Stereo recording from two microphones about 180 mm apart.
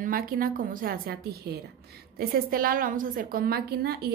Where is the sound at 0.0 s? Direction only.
55° right (ahead or behind).